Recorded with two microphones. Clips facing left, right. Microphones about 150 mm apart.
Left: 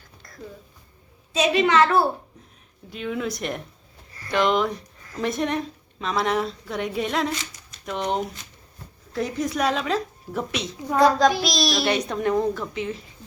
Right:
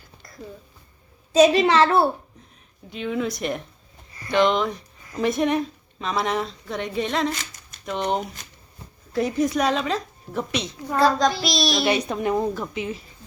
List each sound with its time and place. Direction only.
1.3 s a woman's voice: 40° right (ahead or behind)
2.9 s a woman's voice: centre (ahead or behind)